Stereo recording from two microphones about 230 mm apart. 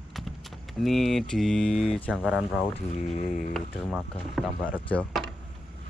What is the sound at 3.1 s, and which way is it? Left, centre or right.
Speech, left.